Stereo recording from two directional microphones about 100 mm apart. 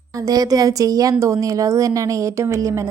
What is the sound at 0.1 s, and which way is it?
A woman's voice, 35° right (ahead or behind).